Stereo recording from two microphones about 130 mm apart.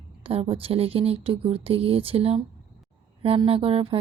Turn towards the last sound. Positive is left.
turn(degrees=-45)  # may be behind; listen again after turning